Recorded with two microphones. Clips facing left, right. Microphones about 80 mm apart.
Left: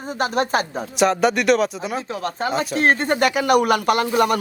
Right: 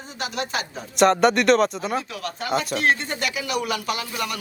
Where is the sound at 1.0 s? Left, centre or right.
Centre.